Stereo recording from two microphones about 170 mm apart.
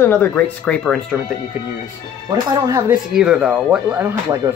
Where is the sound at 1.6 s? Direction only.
10° right (ahead or behind).